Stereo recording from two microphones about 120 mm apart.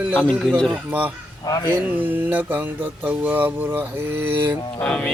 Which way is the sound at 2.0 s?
15° right (ahead or behind).